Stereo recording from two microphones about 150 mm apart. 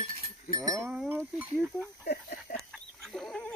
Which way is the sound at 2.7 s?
Centre (ahead or behind).